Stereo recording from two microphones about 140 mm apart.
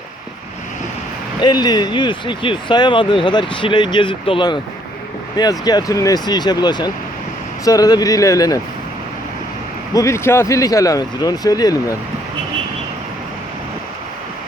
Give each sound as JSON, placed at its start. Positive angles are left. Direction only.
{"t": 1.4, "sound": "speech", "side_deg": 30}
{"t": 9.9, "sound": "speech", "side_deg": 20}